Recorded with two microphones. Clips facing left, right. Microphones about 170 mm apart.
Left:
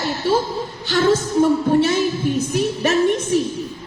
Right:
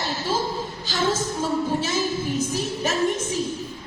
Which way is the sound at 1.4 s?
65° left (ahead or behind).